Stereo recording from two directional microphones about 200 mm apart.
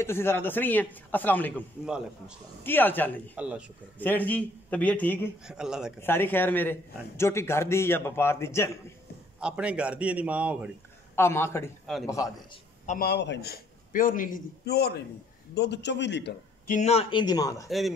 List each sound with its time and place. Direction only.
0.0 s a man's voice: 10° left (ahead or behind)
1.9 s speech: 5° right (ahead or behind)
2.6 s a man's voice: 10° left (ahead or behind)
3.3 s speech: 5° right (ahead or behind)
4.0 s a man's voice: 10° left (ahead or behind)
5.5 s speech: 5° right (ahead or behind)
5.9 s a man's voice: 10° left (ahead or behind)
9.4 s a man's voice: 5° right (ahead or behind)
11.1 s a man's voice: 10° left (ahead or behind)
11.8 s a man's voice: centre (ahead or behind)
12.8 s a man's voice: 40° left (ahead or behind)
13.1 s a man's voice: 60° left (ahead or behind)
16.6 s speech: 35° left (ahead or behind); by 17.6 s 15° left (ahead or behind)
17.6 s speech: centre (ahead or behind)